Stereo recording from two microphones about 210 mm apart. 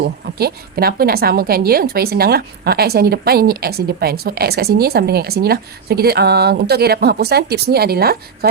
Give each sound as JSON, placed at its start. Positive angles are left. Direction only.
{"t": 0.3, "sound": "a woman's voice", "side_deg": -50}